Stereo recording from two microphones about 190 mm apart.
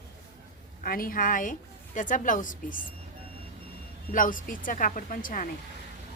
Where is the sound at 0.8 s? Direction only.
50° left (ahead or behind).